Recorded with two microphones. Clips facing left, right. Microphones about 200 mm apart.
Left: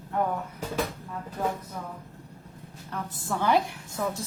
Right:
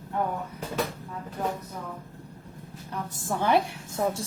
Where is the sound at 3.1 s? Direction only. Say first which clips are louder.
Right 2 dB; 45° right (ahead or behind).